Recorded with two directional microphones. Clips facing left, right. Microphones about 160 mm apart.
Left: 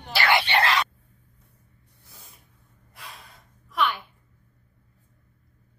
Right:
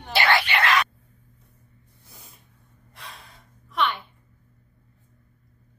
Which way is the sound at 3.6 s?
Centre (ahead or behind).